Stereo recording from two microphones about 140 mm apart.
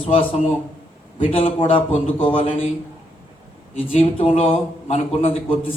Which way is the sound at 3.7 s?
45° left (ahead or behind).